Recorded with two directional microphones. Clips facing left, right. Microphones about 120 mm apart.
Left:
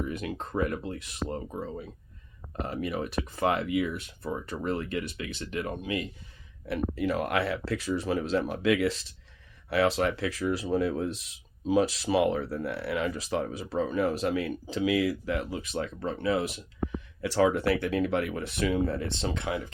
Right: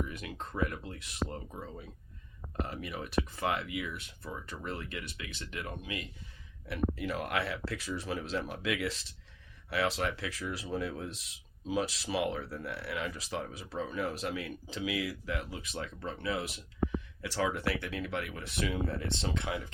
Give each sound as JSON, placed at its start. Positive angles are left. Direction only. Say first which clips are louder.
{"t": 0.1, "sound": "speech", "louder": "left 8 dB", "side_deg": 45}
{"t": 6.7, "sound": "speech", "louder": "left 5 dB", "side_deg": 50}